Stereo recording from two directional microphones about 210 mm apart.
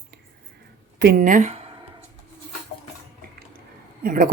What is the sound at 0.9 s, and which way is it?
Speech, 45° right (ahead or behind).